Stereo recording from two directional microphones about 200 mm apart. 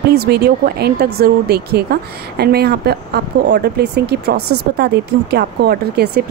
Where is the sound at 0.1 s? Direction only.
55° right (ahead or behind).